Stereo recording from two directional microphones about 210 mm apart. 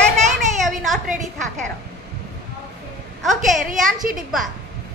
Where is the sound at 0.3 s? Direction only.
Centre (ahead or behind).